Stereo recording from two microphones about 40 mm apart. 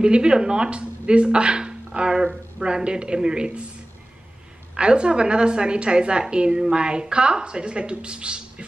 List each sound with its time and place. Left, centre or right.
0.0 s a woman's voice: right
4.7 s a woman's voice: right